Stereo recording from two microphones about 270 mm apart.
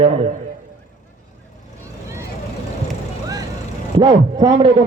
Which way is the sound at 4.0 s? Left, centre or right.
Centre.